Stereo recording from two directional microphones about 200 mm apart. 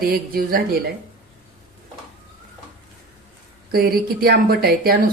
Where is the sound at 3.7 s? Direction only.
50° right (ahead or behind).